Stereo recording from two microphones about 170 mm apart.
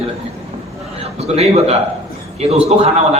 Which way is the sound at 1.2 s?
40° right (ahead or behind).